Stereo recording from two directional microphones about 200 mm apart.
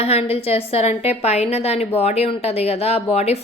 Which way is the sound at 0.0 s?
30° left (ahead or behind).